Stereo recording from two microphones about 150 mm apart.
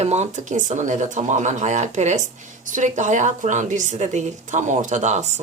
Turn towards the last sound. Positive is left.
turn(degrees=-50)  # may be behind; listen again after turning